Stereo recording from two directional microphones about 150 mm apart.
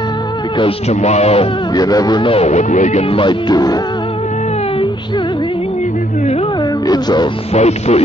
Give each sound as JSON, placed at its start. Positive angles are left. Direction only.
{"t": 0.6, "sound": "speech", "side_deg": 40}
{"t": 1.8, "sound": "speech", "side_deg": 25}
{"t": 6.9, "sound": "speech", "side_deg": 30}
{"t": 7.5, "sound": "speech", "side_deg": 45}